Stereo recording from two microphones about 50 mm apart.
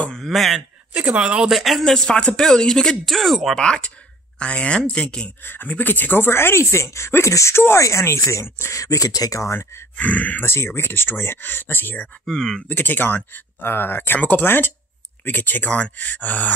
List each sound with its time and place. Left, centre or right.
0.1 s a man's voice: centre
0.9 s speech: right
1.2 s speech: centre
1.5 s speech: centre
2.0 s speech: centre
3.1 s speech: centre
3.5 s speech: centre
5.4 s speech: left
9.5 s speech: left
9.9 s speech: left
10.4 s speech: left
10.7 s speech: left
12.3 s speech: centre
12.6 s speech: left